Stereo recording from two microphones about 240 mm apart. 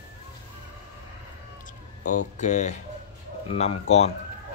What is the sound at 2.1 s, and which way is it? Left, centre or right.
Speech, left.